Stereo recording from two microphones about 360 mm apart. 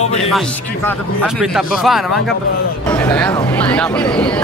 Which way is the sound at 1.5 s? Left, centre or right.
Centre.